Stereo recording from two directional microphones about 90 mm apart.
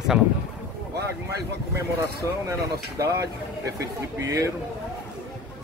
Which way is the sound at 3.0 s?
40° right (ahead or behind).